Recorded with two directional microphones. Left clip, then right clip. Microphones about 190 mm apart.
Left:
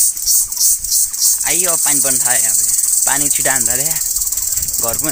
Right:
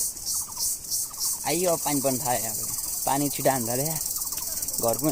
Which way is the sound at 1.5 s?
Centre (ahead or behind).